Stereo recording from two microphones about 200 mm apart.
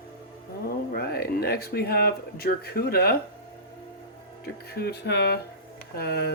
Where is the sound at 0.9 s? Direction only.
50° left (ahead or behind).